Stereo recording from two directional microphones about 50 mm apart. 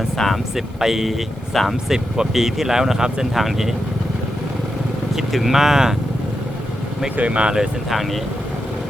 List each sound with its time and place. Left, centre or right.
0.5 s speech: centre
1.9 s speech: centre
5.1 s speech: centre
7.2 s speech: right
7.5 s speech: centre